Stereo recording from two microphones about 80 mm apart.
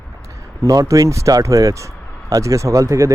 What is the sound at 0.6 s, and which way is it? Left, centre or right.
Speech, right.